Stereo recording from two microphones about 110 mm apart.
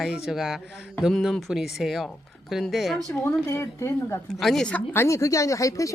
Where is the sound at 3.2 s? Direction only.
25° left (ahead or behind).